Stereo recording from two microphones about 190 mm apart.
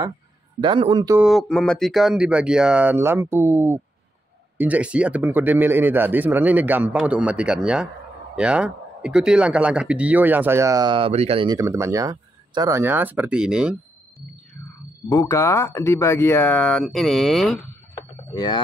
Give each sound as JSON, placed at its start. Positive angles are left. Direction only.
{"t": 0.6, "sound": "a man's voice", "side_deg": -25}
{"t": 1.1, "sound": "a man's voice", "side_deg": 0}
{"t": 11.5, "sound": "a man's voice", "side_deg": -15}
{"t": 15.0, "sound": "speech", "side_deg": 15}
{"t": 18.3, "sound": "speech", "side_deg": 20}